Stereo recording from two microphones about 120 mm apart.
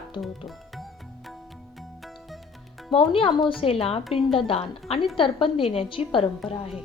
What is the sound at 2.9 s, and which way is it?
A woman's voice, 50° left (ahead or behind).